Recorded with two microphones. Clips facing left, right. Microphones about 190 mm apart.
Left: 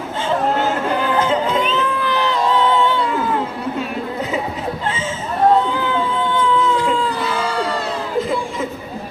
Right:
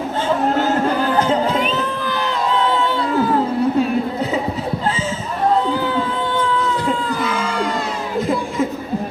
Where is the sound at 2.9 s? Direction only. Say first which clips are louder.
Right 2 dB; 40° right (ahead or behind).